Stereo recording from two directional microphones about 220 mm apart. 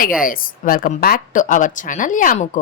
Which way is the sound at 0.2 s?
40° left (ahead or behind).